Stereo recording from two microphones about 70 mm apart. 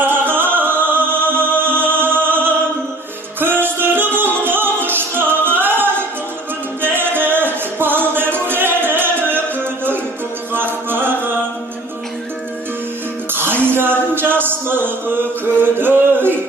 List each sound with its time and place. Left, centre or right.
0.0 s music: right
10.5 s music: right
13.3 s music: right
15.8 s a sound: right